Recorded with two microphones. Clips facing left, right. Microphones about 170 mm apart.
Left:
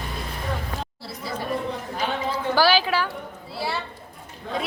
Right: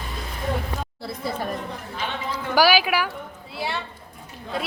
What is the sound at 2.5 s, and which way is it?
Speech, 10° right (ahead or behind).